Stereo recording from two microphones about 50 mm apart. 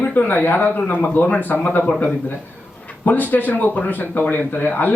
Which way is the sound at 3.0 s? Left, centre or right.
Left.